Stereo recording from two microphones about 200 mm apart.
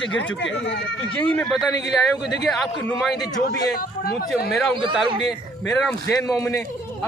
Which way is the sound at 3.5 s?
50° left (ahead or behind).